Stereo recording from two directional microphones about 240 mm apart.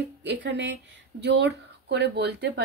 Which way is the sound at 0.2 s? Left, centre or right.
Right.